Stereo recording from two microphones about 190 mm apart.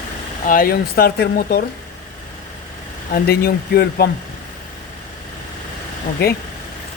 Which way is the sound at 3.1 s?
50° left (ahead or behind).